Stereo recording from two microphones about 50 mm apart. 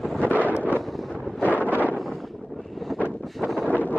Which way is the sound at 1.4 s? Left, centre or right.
Left.